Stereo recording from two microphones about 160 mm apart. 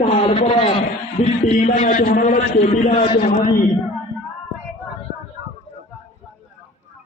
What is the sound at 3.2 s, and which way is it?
Speech, 60° left (ahead or behind).